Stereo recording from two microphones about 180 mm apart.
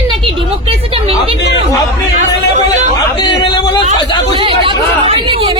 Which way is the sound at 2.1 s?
40° right (ahead or behind).